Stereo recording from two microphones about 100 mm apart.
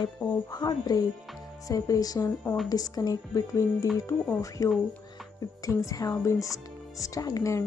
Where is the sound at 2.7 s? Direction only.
40° left (ahead or behind).